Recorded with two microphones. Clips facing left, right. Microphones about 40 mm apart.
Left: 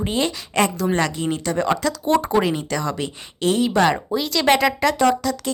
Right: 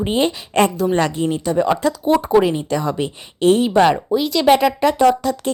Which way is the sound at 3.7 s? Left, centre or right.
Centre.